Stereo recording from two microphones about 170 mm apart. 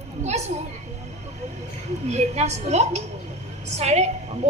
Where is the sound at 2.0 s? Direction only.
40° right (ahead or behind).